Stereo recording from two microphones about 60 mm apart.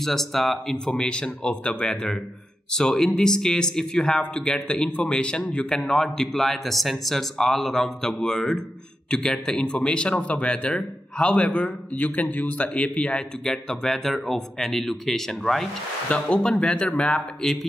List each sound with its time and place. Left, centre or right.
0.0 s a man's voice: centre
13.4 s speech: centre
16.1 s a man's voice: centre